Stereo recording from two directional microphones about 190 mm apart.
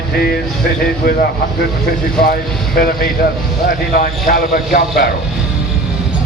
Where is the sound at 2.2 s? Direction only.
50° left (ahead or behind).